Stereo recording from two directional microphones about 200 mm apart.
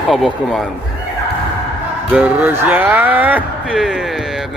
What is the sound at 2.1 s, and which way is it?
Speech, 5° right (ahead or behind).